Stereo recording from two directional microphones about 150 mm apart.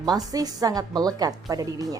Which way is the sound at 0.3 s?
25° right (ahead or behind).